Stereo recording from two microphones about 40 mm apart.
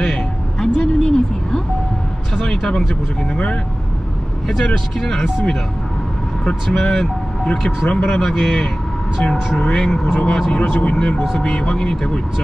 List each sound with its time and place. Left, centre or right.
0.0 s vehicle: centre
2.3 s speech: centre
4.9 s a man's voice: centre
6.7 s a man's voice: centre
7.5 s speech: left
8.2 s a man's voice: centre
10.0 s speech: left
10.3 s a man's voice: centre